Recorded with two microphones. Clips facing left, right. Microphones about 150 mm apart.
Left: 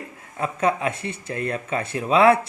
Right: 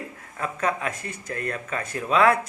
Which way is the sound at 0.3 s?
30° left (ahead or behind).